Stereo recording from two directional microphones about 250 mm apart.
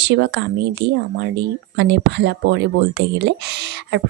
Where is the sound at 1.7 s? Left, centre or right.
Right.